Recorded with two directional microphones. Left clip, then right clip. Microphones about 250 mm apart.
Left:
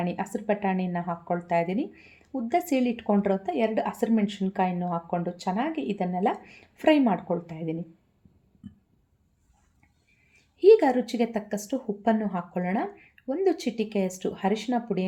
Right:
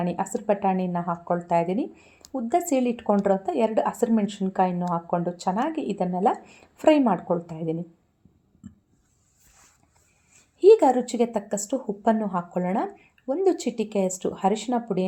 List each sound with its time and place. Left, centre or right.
0.0 s speech: right
10.6 s speech: centre